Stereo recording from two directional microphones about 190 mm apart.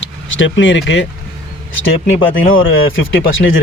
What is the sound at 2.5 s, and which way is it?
Speech, 90° left.